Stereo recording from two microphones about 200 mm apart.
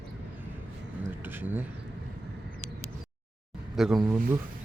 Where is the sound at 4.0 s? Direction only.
15° right (ahead or behind).